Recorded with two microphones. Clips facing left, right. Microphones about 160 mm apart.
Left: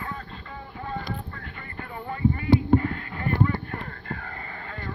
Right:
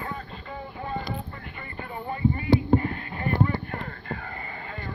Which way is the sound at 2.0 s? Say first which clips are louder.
Left 1 dB; 20° right (ahead or behind).